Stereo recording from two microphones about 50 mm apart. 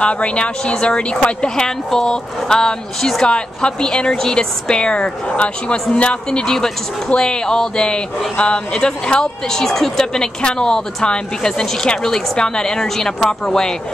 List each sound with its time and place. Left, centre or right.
0.0 s speech: left